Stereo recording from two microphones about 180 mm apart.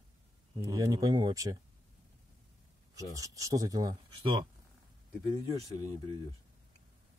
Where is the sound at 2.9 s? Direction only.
20° right (ahead or behind).